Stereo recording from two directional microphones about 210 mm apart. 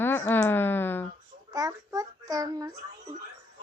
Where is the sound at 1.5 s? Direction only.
15° right (ahead or behind).